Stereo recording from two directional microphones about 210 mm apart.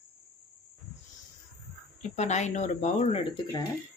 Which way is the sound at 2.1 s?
35° left (ahead or behind).